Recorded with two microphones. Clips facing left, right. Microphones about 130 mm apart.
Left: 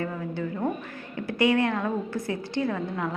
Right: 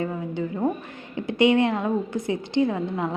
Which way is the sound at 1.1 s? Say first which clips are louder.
Right 4 dB; 20° right (ahead or behind).